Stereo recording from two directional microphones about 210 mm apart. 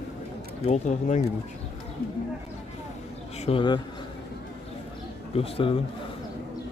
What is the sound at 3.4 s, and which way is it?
Speech, 25° left (ahead or behind).